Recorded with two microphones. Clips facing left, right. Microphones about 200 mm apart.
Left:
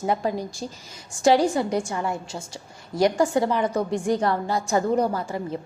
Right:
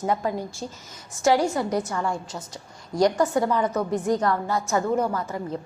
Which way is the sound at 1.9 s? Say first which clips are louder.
Even; 20° left (ahead or behind).